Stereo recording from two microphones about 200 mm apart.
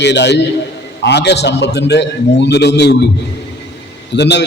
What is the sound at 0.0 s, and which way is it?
A man's voice, 60° left (ahead or behind).